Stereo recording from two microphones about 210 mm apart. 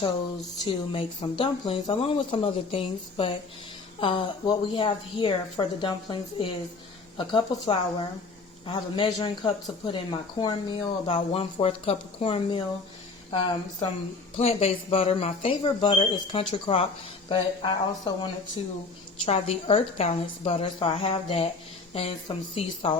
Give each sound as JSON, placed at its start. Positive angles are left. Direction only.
{"t": 0.6, "sound": "speech", "side_deg": 25}
{"t": 22.5, "sound": "speech", "side_deg": 25}